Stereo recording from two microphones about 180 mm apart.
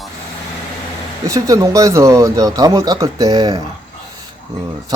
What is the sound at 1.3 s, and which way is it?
Speech, 20° right (ahead or behind).